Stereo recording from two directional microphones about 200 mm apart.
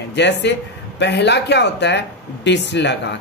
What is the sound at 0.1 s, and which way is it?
Speech, 60° left (ahead or behind).